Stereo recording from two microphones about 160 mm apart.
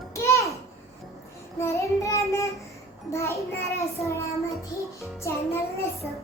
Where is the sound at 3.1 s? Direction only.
20° left (ahead or behind).